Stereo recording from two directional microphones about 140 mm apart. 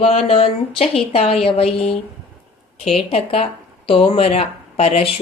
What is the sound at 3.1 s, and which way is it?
A woman's voice, 45° left (ahead or behind).